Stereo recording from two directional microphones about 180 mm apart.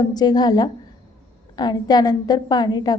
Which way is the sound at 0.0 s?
20° left (ahead or behind).